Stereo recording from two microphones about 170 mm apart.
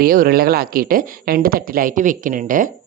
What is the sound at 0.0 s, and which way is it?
A woman's voice, 60° right (ahead or behind).